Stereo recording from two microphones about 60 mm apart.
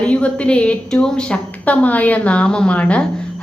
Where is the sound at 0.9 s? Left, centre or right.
Centre.